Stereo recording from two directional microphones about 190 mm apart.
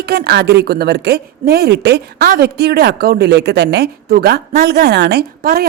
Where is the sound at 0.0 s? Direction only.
55° right (ahead or behind).